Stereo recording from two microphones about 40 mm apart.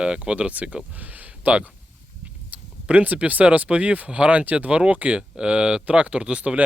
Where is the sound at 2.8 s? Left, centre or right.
Right.